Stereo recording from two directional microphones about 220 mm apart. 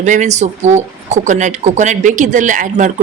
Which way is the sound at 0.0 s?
35° right (ahead or behind).